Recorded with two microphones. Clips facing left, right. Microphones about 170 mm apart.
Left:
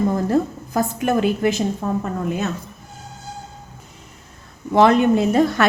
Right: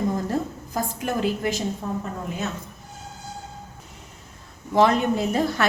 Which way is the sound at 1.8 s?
80° left.